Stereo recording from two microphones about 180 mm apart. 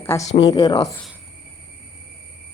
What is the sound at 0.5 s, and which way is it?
Speech, 20° left (ahead or behind).